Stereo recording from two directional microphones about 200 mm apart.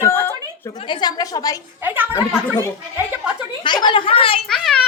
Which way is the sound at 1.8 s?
10° right (ahead or behind).